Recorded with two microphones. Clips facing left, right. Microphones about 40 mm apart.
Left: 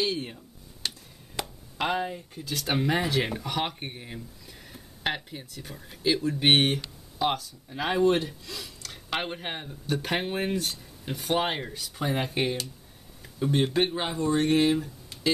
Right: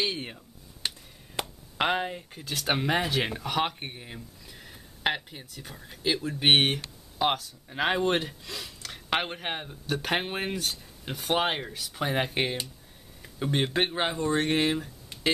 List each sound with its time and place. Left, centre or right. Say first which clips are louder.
0.0 s speech: left 2 dB; right
0.8 s a sound: even; right
1.4 s chop: even; centre
1.8 s speech: right 1 dB; right; by 6.8 s centre
7.7 s speech: left 2 dB; right
8.5 s a sound: right 1 dB; centre
9.1 s speech: right 2 dB; centre
10.5 s speech: left 2 dB; centre
12.0 s speech: even; right